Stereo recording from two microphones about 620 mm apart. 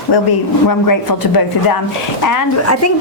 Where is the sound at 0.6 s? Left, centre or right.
Left.